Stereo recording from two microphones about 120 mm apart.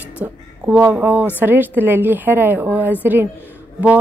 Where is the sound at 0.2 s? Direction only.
10° right (ahead or behind).